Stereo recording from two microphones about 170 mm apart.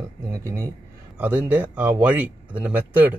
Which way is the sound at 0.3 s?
20° right (ahead or behind).